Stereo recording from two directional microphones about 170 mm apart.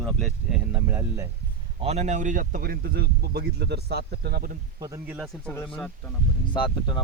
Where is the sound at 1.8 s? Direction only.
40° right (ahead or behind); by 4.5 s 65° right (ahead or behind).